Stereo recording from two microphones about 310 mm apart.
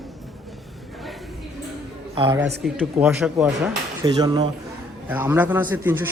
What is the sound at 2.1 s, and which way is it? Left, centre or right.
Speech, centre.